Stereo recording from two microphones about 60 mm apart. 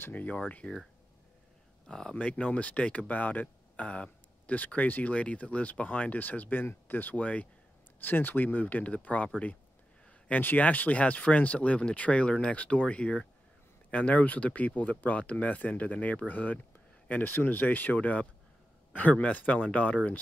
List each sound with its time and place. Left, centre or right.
0.0 s speech: left
1.9 s speech: centre
10.4 s speech: left